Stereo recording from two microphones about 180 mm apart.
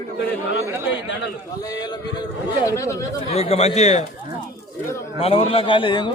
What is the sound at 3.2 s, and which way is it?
Speech, 35° left (ahead or behind).